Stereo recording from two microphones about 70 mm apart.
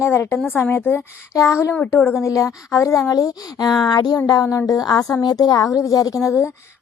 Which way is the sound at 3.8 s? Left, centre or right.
Left.